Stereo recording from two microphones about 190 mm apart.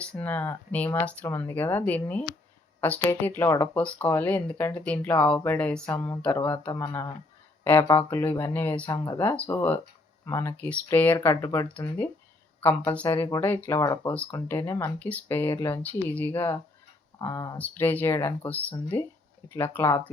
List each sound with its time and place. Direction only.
0.0 s speech: 5° left (ahead or behind)
14.1 s speech: 5° left (ahead or behind)